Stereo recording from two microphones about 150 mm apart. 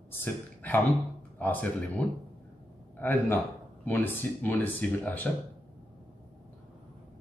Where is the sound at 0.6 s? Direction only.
10° left (ahead or behind).